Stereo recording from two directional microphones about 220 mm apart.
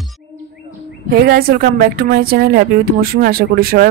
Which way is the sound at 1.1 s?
45° right (ahead or behind).